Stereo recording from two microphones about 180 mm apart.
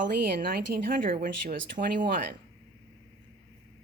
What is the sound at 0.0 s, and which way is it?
A woman's voice, 50° right (ahead or behind).